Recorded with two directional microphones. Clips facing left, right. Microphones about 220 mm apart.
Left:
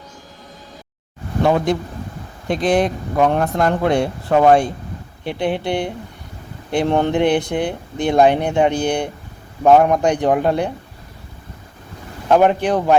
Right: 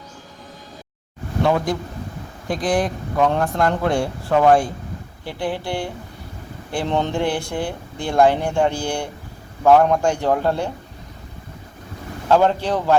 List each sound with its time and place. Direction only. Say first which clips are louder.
1.5 s a man's voice: left 3 dB; 20° left (ahead or behind)
12.3 s a man's voice: left 3 dB; 15° left (ahead or behind)